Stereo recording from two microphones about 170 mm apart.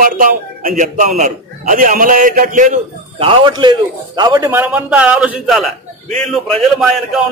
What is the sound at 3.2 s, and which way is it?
A man's voice, 30° right (ahead or behind).